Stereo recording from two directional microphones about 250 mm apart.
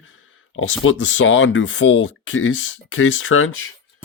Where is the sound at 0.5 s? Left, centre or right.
Left.